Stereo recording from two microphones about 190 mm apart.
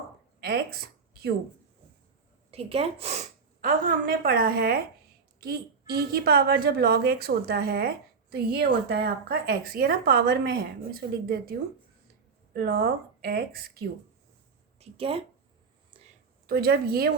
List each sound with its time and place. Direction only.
0.3 s a sound: 55° right (ahead or behind)
2.5 s a woman's voice: 30° right (ahead or behind); by 11.5 s 55° right (ahead or behind)
12.5 s a woman's voice: 55° right (ahead or behind)
14.8 s speech: 30° right (ahead or behind)
16.5 s a woman's voice: 55° right (ahead or behind)